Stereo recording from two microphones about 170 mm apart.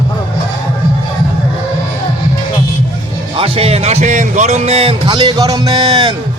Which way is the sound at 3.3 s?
35° right (ahead or behind).